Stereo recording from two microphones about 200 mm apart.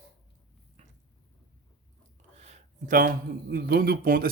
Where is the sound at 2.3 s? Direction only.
35° right (ahead or behind).